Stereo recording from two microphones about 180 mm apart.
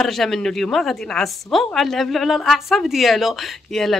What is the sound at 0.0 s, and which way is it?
A woman's voice, centre (ahead or behind).